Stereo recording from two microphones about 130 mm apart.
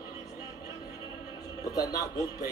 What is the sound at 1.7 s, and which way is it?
Speech, 30° left (ahead or behind).